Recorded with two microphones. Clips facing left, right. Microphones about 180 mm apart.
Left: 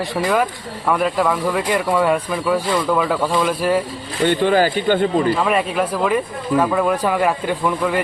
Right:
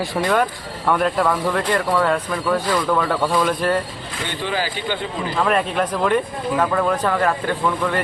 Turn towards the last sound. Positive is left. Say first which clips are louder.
# left 2 dB
turn(degrees=15)  # may be behind; listen again after turning